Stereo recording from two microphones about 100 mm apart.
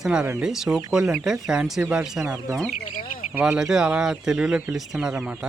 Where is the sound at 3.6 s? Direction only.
5° right (ahead or behind).